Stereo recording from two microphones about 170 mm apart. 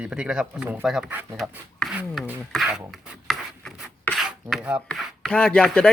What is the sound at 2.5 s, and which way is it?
Speech, centre (ahead or behind).